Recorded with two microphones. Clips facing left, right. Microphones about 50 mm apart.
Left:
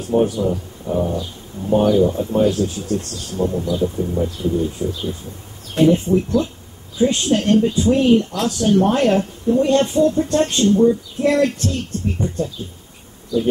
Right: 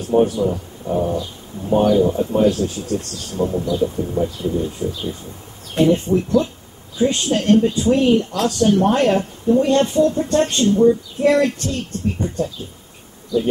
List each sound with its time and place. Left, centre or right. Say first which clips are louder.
0.2 s speech: right 1 dB; centre